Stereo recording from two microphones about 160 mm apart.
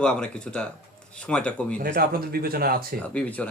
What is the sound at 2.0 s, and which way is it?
Speech, 70° right (ahead or behind).